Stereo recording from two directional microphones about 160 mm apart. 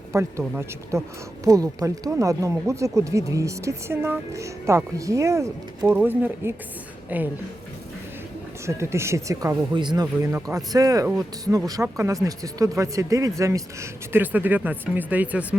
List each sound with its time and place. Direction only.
0.1 s speech: 20° right (ahead or behind)
8.6 s speech: 15° right (ahead or behind)